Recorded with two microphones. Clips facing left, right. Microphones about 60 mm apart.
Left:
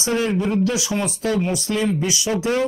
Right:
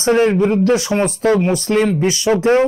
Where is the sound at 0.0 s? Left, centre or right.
Right.